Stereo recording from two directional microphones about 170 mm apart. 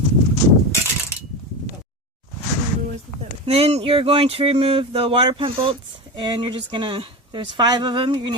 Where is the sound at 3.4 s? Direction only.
35° right (ahead or behind).